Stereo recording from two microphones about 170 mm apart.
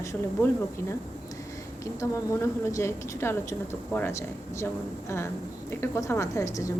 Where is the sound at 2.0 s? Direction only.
15° left (ahead or behind).